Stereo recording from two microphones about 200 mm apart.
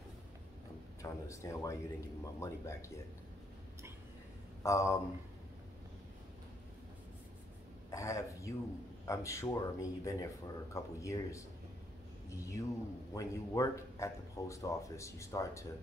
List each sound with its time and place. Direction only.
1.2 s speech: 15° left (ahead or behind)
4.6 s speech: 15° left (ahead or behind)
7.9 s speech: 15° left (ahead or behind)